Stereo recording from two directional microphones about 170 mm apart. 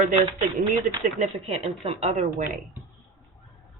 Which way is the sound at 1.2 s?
35° right (ahead or behind).